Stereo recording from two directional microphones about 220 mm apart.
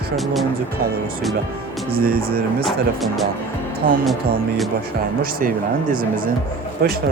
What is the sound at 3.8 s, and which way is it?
Speech, 40° right (ahead or behind).